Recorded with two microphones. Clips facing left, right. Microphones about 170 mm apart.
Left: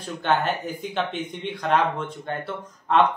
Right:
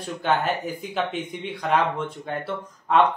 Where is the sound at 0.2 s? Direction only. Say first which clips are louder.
Even; 5° right (ahead or behind).